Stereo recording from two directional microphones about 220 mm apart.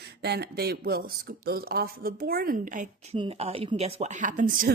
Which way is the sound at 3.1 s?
25° right (ahead or behind).